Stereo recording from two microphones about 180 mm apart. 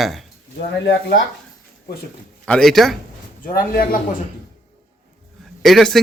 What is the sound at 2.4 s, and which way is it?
Speech, 5° left (ahead or behind).